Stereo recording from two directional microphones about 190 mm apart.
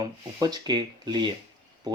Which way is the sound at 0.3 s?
20° right (ahead or behind).